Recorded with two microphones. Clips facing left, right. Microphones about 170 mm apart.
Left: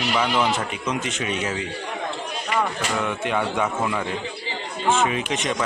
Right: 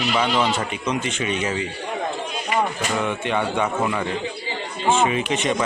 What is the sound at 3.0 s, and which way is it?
A man's voice, centre (ahead or behind).